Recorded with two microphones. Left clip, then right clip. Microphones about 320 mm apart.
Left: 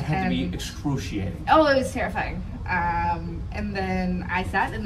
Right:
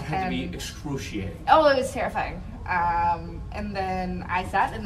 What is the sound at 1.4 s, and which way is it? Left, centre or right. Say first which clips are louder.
Speech: even; centre.